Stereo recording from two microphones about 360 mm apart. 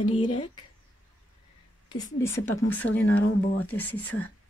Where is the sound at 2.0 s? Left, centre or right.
Centre.